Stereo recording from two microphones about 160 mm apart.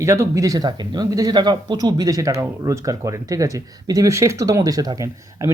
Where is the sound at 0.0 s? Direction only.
20° right (ahead or behind).